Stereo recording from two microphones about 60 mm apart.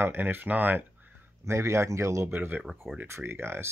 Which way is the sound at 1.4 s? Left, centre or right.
Right.